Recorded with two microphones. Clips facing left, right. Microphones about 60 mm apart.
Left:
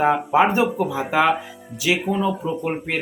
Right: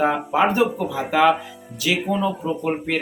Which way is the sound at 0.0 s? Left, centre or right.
Centre.